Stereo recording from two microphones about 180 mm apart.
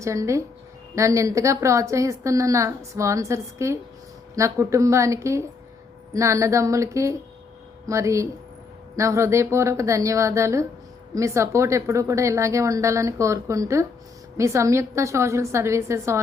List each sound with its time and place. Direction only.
0.0 s a woman's voice: 15° right (ahead or behind)